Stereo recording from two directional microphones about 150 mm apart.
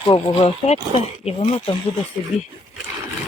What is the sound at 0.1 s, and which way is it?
Speech, 45° left (ahead or behind).